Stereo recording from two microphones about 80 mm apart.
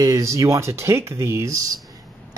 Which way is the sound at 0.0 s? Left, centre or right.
Right.